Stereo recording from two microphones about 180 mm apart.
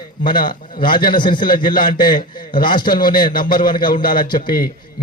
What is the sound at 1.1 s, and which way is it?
A man's voice, 25° left (ahead or behind).